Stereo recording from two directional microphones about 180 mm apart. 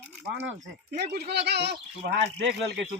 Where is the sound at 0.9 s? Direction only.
60° right (ahead or behind).